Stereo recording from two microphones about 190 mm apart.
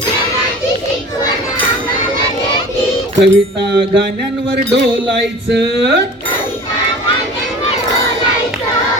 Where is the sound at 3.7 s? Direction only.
60° right (ahead or behind).